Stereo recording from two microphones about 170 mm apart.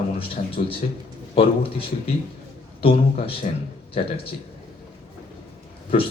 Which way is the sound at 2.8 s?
35° left (ahead or behind).